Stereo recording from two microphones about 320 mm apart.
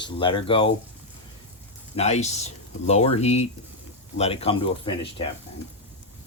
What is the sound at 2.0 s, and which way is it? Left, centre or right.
Speech, left.